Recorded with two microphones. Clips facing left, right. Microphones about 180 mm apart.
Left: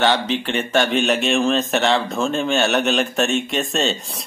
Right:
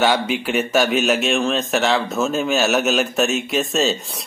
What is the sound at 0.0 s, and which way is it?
Speech, 10° right (ahead or behind).